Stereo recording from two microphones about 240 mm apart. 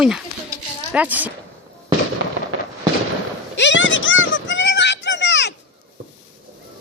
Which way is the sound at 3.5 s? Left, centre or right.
Left.